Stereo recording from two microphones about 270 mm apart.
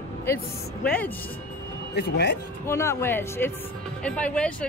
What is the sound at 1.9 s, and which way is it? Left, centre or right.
Speech, left.